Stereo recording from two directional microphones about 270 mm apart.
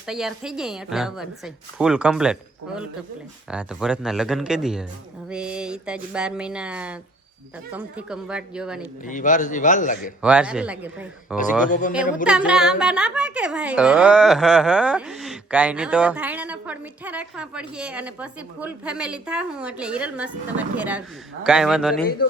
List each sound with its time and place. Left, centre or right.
0.1 s speech: centre
9.0 s a man's voice: left
10.2 s speech: centre